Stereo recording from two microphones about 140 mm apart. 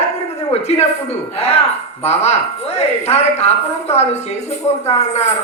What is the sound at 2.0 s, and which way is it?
Music, 50° left (ahead or behind).